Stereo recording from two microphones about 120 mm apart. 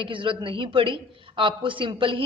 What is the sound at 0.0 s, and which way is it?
A woman's voice, 45° right (ahead or behind).